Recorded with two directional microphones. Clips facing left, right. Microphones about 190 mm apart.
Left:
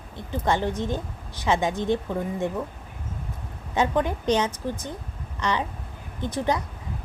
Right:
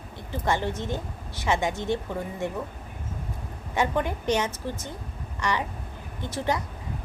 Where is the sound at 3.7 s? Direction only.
20° left (ahead or behind).